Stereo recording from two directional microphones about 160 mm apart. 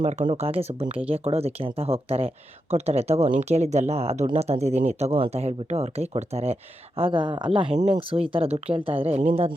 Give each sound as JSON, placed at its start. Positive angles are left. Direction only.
{"t": 0.0, "sound": "speech", "side_deg": -45}